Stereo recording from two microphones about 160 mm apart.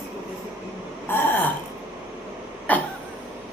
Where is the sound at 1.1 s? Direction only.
10° left (ahead or behind).